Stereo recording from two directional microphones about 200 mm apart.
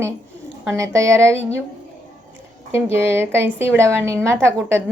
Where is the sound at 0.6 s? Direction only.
15° right (ahead or behind).